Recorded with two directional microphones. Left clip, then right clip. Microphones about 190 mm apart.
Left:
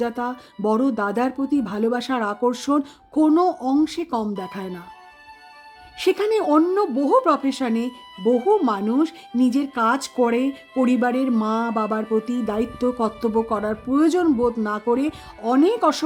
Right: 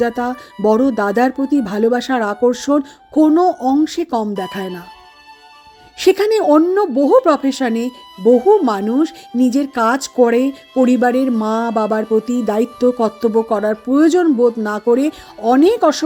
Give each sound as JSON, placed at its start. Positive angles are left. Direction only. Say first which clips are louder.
{"t": 0.0, "sound": "speech", "louder": "right 7 dB", "side_deg": -15}
{"t": 6.0, "sound": "speech", "louder": "right 7 dB", "side_deg": -20}